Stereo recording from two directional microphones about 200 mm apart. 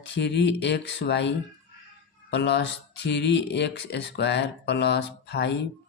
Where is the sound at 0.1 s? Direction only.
60° left (ahead or behind).